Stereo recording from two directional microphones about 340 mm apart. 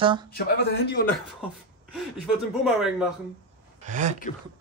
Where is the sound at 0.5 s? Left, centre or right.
Left.